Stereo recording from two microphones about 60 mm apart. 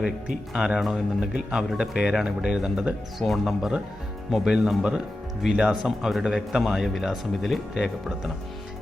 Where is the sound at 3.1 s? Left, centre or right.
Centre.